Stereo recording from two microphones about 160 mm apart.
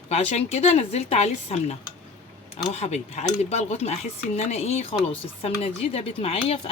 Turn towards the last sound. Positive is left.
turn(degrees=40)  # may be behind; listen again after turning